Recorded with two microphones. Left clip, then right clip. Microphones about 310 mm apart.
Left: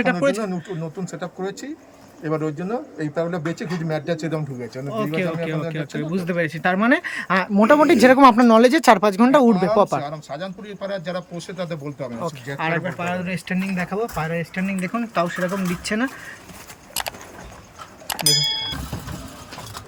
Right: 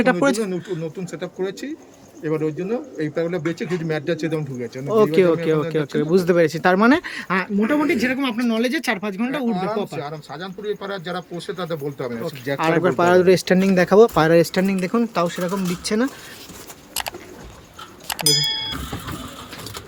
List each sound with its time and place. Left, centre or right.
0.0 s a man's voice: centre
4.9 s speech: centre
7.6 s speech: centre
10.0 s a man's voice: centre
16.9 s a sound: centre